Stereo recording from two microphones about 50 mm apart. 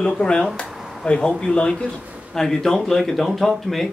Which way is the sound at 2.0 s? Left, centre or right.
Right.